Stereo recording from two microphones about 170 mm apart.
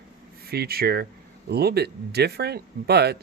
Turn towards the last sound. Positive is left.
turn(degrees=-70)  # may be behind; listen again after turning